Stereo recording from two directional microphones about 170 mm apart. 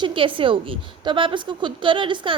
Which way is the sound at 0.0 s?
30° right (ahead or behind).